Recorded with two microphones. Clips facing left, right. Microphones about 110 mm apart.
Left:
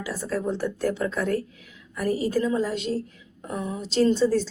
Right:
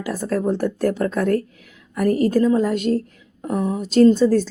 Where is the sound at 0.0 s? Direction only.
50° right (ahead or behind).